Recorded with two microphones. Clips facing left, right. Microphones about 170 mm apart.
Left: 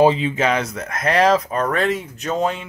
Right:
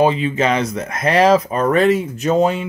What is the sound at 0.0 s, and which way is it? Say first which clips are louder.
Speech: even; 30° left (ahead or behind).